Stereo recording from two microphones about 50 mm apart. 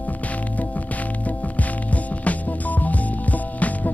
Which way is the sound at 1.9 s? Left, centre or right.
Left.